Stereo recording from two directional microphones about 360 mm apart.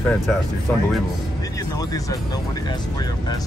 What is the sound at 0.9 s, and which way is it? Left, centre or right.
Speech, centre.